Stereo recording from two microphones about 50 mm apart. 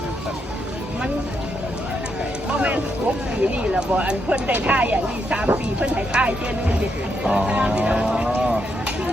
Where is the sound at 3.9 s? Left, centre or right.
Right.